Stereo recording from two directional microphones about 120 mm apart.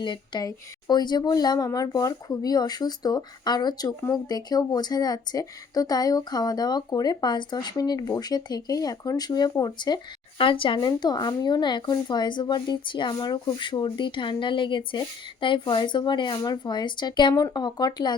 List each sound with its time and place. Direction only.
0.0 s speech: 35° left (ahead or behind)
10.8 s speech: 35° left (ahead or behind)